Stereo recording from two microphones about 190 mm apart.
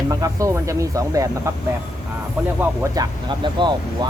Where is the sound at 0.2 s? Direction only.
15° right (ahead or behind).